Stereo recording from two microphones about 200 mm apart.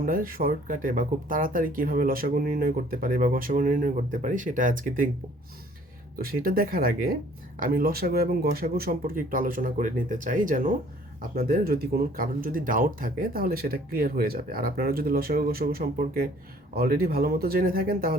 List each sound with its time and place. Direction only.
0.0 s speech: 45° right (ahead or behind)
6.1 s speech: 45° right (ahead or behind)